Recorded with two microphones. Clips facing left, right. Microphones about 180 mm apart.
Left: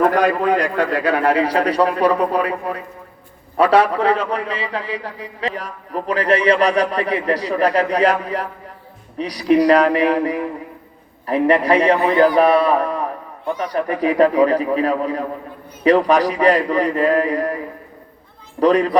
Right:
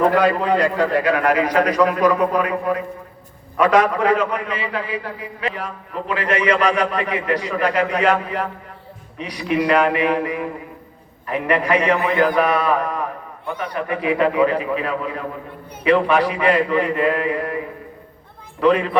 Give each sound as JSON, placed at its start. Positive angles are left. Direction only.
{"t": 1.0, "sound": "a man's voice", "side_deg": 30}
{"t": 18.6, "sound": "a man's voice", "side_deg": 40}